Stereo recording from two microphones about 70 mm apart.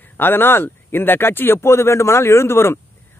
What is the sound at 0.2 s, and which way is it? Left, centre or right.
Speech, left.